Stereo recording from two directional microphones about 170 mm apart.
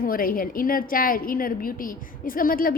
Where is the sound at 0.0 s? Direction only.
60° left (ahead or behind).